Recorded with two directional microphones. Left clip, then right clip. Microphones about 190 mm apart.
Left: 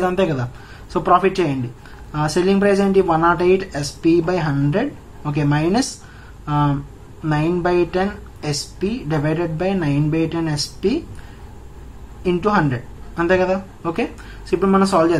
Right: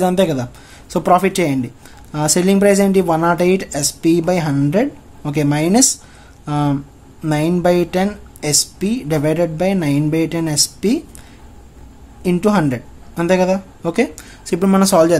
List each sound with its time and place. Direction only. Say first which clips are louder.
0.0 s speech: right 3 dB; 40° right (ahead or behind)
12.2 s speech: right 1 dB; 45° right (ahead or behind); by 15.1 s 60° right (ahead or behind)